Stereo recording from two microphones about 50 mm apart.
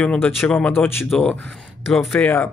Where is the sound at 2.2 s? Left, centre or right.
Left.